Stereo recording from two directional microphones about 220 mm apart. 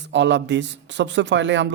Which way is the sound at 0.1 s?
55° right (ahead or behind).